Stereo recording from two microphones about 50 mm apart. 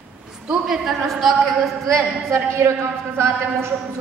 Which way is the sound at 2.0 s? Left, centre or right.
Right.